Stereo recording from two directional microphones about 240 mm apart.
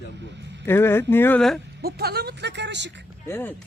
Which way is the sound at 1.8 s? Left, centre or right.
Right.